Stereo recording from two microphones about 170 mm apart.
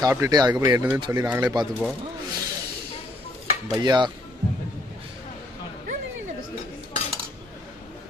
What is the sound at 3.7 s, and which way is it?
Speech, 25° right (ahead or behind).